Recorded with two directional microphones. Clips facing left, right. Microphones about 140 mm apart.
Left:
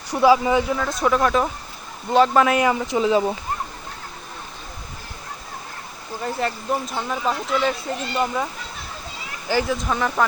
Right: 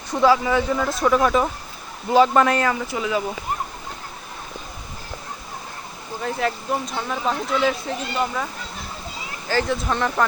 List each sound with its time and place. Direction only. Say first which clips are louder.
0.1 s speech: left 2 dB; 15° left (ahead or behind)
0.8 s speech: right 1 dB; centre (ahead or behind)
2.6 s speech: left 3 dB; 20° left (ahead or behind)
6.2 s speech: even; centre (ahead or behind)
9.6 s speech: even; centre (ahead or behind)